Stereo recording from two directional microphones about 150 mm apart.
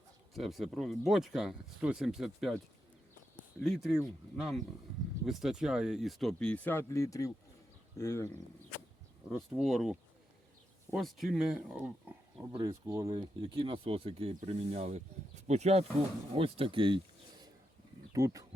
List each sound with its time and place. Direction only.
0.3 s speech: centre (ahead or behind); by 8.4 s 15° left (ahead or behind)
9.6 s speech: centre (ahead or behind)
12.6 s speech: 20° right (ahead or behind)
18.1 s speech: 25° right (ahead or behind)